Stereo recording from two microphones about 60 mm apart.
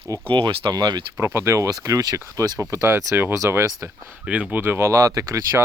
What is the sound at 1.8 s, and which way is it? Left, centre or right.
Speech, right.